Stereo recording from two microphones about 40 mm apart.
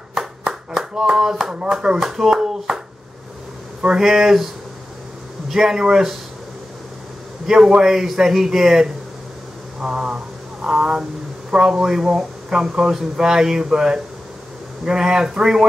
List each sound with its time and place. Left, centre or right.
0.1 s clapping: centre
0.7 s speech: centre
4.0 s speech: centre
5.5 s speech: centre
7.4 s speech: centre